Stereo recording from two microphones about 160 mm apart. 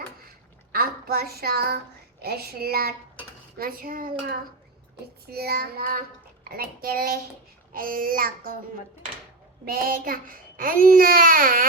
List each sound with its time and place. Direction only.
0.7 s child singing: 70° right (ahead or behind)
3.6 s a child's voice: 65° right (ahead or behind)
5.3 s a child's voice: 80° right; by 8.5 s 65° right (ahead or behind)
9.6 s a child's voice: 65° right (ahead or behind)